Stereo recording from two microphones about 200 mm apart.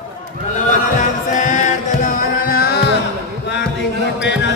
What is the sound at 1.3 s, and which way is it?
Music, 40° left (ahead or behind).